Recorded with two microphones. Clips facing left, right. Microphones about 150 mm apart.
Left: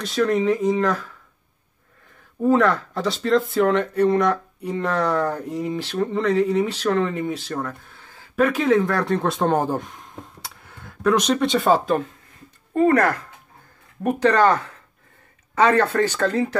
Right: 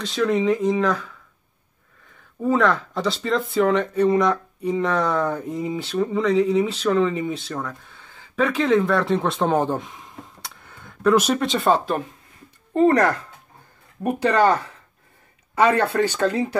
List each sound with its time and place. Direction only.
0.0 s speech: centre (ahead or behind)
2.5 s speech: centre (ahead or behind)
12.7 s speech: 25° right (ahead or behind)
14.0 s speech: 10° right (ahead or behind)
15.6 s speech: 10° right (ahead or behind)